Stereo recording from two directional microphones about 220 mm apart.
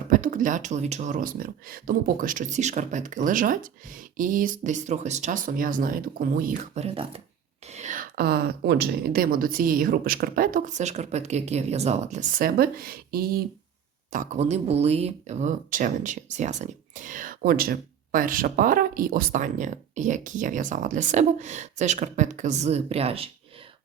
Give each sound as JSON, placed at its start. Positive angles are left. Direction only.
{"t": 0.1, "sound": "speech", "side_deg": -40}